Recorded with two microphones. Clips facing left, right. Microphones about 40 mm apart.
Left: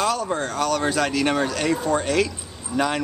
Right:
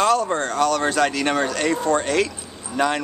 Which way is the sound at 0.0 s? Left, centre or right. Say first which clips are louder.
Right 4 dB; centre.